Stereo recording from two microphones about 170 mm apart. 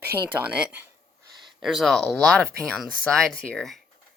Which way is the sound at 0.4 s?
5° right (ahead or behind).